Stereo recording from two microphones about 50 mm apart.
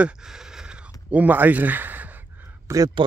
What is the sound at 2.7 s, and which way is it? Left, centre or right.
Speech, right.